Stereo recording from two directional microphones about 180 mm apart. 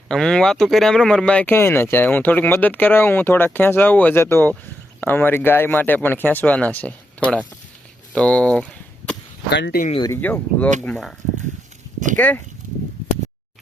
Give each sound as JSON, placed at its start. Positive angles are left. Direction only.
{"t": 0.1, "sound": "speech", "side_deg": 5}
{"t": 8.1, "sound": "a sound", "side_deg": 5}
{"t": 9.5, "sound": "speech", "side_deg": 70}
{"t": 10.0, "sound": "speech", "side_deg": 10}